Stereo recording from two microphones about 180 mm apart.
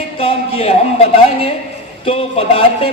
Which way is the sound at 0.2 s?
30° left (ahead or behind).